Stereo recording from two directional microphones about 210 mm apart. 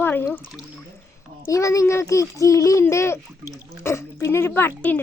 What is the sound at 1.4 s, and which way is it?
A woman's voice, 15° left (ahead or behind).